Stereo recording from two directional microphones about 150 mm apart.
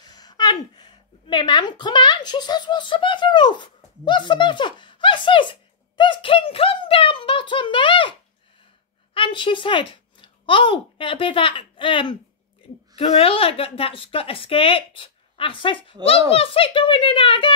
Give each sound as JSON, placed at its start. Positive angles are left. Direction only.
{"t": 0.0, "sound": "a woman's voice", "side_deg": 25}